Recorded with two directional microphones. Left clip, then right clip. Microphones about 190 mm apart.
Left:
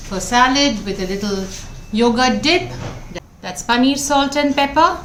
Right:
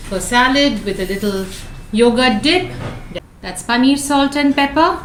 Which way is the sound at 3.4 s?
55° left (ahead or behind).